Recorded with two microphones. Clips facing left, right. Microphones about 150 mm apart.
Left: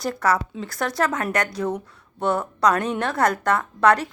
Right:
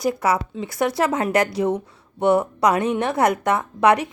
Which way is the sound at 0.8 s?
25° right (ahead or behind).